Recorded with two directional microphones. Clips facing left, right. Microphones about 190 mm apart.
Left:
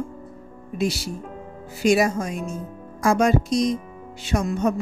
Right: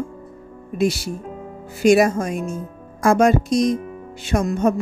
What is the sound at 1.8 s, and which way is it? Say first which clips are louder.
Speech: right 4 dB; 50° right (ahead or behind).